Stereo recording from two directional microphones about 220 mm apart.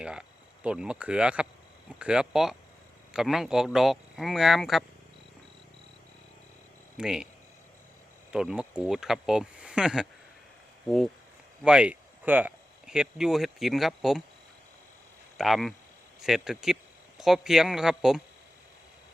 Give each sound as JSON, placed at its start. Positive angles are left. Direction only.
{"t": 0.0, "sound": "speech", "side_deg": -5}
{"t": 6.9, "sound": "speech", "side_deg": -5}
{"t": 8.3, "sound": "speech", "side_deg": -5}
{"t": 15.4, "sound": "speech", "side_deg": 0}